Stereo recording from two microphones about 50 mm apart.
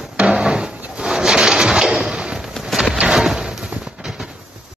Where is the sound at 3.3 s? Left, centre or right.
Centre.